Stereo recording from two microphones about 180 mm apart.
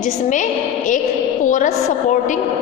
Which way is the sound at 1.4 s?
45° left (ahead or behind).